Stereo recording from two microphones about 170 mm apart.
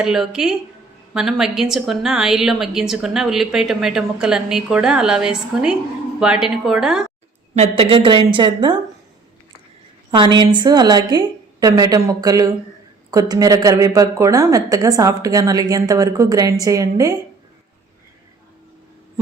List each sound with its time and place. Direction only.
0.0 s a woman's voice: 5° right (ahead or behind)
7.5 s a woman's voice: 35° right (ahead or behind)
10.1 s a woman's voice: 25° right (ahead or behind)